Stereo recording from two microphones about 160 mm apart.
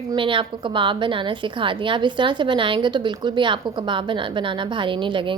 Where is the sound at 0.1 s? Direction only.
30° right (ahead or behind).